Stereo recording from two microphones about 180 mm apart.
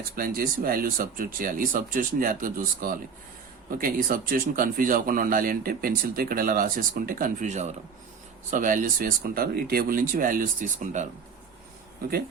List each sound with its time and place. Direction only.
0.2 s speech: 55° right (ahead or behind)